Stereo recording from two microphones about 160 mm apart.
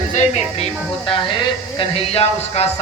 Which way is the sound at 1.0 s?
30° left (ahead or behind).